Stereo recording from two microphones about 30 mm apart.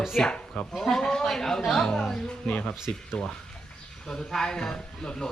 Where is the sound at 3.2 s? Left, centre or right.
Left.